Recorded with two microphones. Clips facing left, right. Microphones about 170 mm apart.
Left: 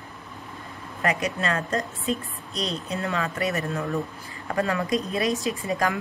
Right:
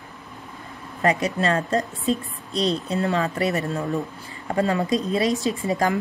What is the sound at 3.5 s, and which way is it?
A woman's voice, 25° right (ahead or behind).